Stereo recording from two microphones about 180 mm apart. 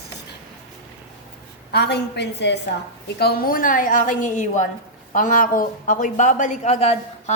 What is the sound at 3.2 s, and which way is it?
Speech, 55° left (ahead or behind).